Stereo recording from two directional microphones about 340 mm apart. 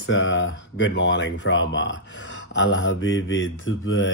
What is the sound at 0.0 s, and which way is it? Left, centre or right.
Speech, left.